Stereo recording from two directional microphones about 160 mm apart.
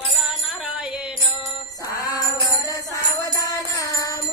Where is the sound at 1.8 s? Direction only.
20° left (ahead or behind).